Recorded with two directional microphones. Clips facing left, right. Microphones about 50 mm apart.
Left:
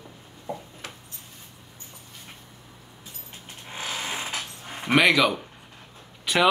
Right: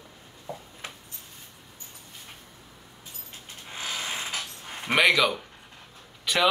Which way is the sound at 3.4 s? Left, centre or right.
Left.